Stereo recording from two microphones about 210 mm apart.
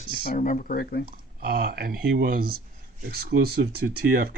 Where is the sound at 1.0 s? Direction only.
45° right (ahead or behind).